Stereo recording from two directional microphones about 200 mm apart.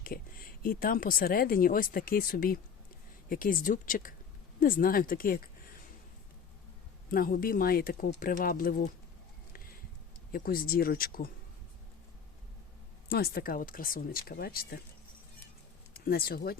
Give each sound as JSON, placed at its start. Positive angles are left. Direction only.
{"t": 0.0, "sound": "speech", "side_deg": 45}
{"t": 7.1, "sound": "speech", "side_deg": 45}
{"t": 10.3, "sound": "speech", "side_deg": 45}
{"t": 13.1, "sound": "speech", "side_deg": 50}
{"t": 15.9, "sound": "speech", "side_deg": 50}